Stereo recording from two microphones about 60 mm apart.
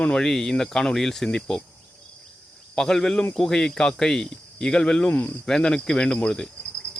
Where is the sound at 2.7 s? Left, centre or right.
Centre.